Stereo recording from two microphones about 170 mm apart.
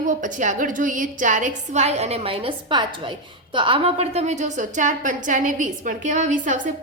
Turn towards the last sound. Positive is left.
turn(degrees=-50)  # may be behind; listen again after turning